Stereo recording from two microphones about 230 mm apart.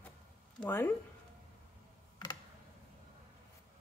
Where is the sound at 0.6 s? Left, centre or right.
Centre.